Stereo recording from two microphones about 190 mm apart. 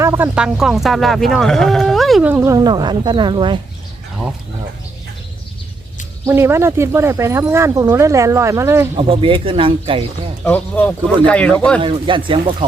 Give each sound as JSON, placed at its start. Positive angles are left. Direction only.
{"t": 0.0, "sound": "speech", "side_deg": -10}
{"t": 6.2, "sound": "speech", "side_deg": -15}
{"t": 9.0, "sound": "speech", "side_deg": -25}
{"t": 10.4, "sound": "speech", "side_deg": 10}
{"t": 11.8, "sound": "speech", "side_deg": -25}